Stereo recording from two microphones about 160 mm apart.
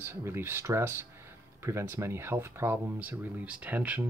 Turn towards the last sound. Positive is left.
turn(degrees=-10)  # may be behind; listen again after turning